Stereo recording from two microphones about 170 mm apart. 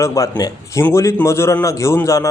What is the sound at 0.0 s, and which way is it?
A man's voice, 20° left (ahead or behind).